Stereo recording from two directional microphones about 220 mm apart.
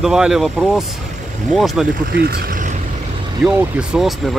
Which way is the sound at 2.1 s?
45° right (ahead or behind).